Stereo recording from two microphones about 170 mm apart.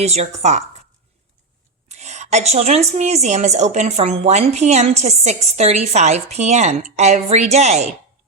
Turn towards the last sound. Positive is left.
turn(degrees=-40)  # may be behind; listen again after turning